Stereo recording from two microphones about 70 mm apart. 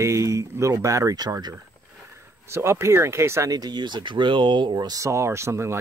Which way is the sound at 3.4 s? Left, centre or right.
Right.